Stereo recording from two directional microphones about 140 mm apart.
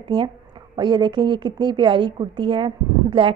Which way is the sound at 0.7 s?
35° right (ahead or behind).